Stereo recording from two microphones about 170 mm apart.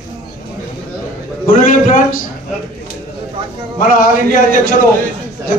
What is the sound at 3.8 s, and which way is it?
Speech, 55° left (ahead or behind).